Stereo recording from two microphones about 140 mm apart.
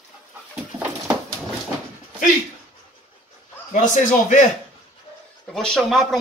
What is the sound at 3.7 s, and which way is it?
Speech, 65° left (ahead or behind).